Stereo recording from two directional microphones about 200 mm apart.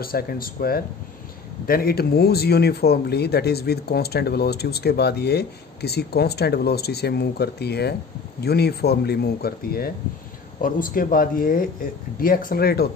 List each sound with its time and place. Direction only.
0.0 s speech: 50° left (ahead or behind)